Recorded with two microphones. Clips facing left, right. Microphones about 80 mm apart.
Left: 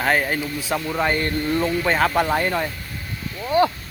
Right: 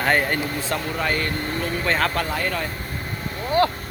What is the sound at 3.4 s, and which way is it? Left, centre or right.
Speech, centre.